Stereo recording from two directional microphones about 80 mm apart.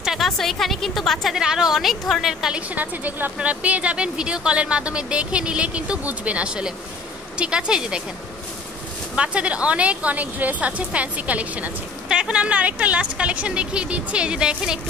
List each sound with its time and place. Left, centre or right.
0.0 s a woman's voice: centre
2.7 s speech: right
9.1 s speech: centre